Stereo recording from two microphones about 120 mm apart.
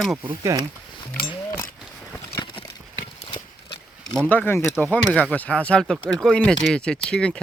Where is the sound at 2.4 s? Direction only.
45° left (ahead or behind).